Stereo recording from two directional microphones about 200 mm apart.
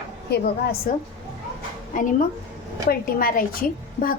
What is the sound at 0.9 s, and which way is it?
A woman's voice, 40° left (ahead or behind).